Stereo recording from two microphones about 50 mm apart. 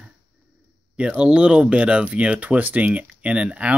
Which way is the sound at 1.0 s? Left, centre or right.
Right.